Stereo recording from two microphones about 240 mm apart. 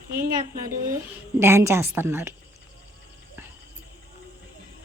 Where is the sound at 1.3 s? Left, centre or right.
Centre.